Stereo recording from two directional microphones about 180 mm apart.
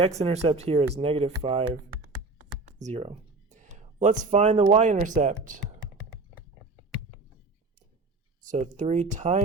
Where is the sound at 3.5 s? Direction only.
40° right (ahead or behind).